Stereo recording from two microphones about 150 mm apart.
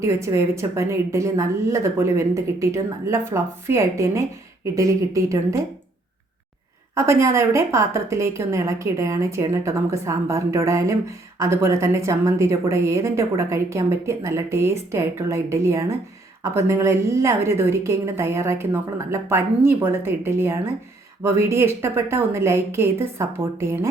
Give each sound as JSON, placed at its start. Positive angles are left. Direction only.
{"t": 0.0, "sound": "a woman's voice", "side_deg": -20}
{"t": 6.9, "sound": "a woman's voice", "side_deg": -20}